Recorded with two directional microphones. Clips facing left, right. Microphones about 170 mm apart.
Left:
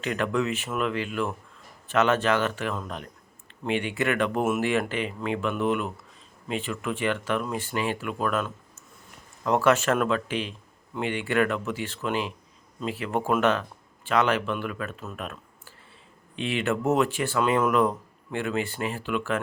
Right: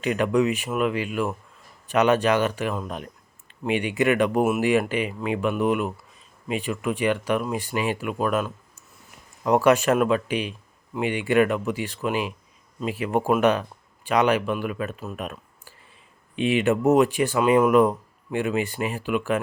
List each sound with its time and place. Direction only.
0.0 s speech: 15° right (ahead or behind)